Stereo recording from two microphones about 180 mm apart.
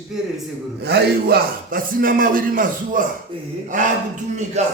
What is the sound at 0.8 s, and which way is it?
A man's voice, 65° right (ahead or behind).